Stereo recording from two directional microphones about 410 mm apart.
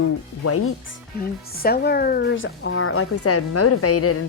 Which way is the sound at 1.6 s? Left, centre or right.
Left.